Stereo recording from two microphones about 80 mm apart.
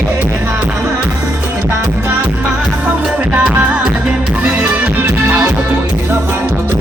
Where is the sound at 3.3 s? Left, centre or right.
Centre.